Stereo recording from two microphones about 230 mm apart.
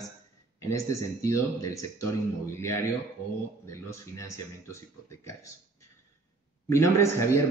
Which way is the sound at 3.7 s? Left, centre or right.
Centre.